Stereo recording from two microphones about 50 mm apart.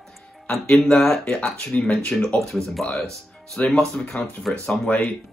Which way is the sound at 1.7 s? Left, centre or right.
Left.